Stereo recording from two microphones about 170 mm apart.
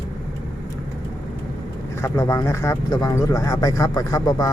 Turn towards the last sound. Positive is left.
turn(degrees=20)  # may be behind; listen again after turning